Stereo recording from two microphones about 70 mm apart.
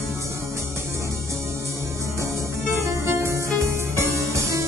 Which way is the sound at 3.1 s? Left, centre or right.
Right.